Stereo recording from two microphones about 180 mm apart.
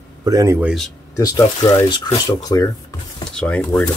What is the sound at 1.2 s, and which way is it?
Speech, 20° left (ahead or behind).